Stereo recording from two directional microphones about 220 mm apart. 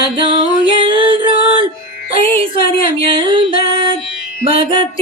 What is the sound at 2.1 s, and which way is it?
Music, 25° right (ahead or behind).